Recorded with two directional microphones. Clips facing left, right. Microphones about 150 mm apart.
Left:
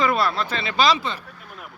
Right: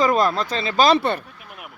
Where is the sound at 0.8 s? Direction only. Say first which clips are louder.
Right 4 dB; 60° right (ahead or behind).